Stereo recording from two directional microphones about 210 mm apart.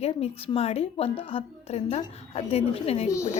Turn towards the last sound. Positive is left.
turn(degrees=15)  # may be behind; listen again after turning